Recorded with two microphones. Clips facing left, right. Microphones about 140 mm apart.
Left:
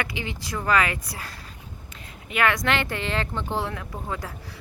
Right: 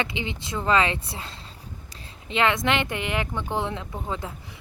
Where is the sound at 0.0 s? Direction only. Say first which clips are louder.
Right 1 dB; 20° right (ahead or behind).